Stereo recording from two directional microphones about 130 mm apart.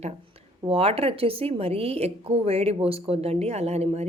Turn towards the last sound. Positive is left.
turn(degrees=-55)  # may be behind; listen again after turning